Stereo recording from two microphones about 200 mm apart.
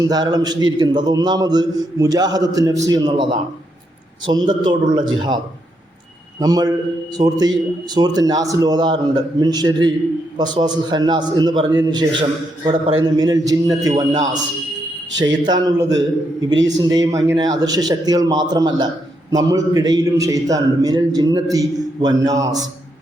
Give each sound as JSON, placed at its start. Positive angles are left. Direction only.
{"t": 0.0, "sound": "a man's voice", "side_deg": -20}
{"t": 4.3, "sound": "a man's voice", "side_deg": -20}
{"t": 6.4, "sound": "a man's voice", "side_deg": -20}